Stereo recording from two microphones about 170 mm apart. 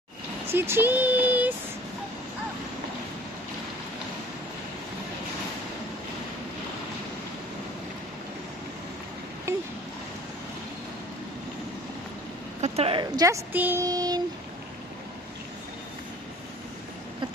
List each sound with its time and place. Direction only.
0.5 s speech: 15° right (ahead or behind)
12.6 s a sound: 35° right (ahead or behind)
13.0 s a woman's voice: 20° right (ahead or behind)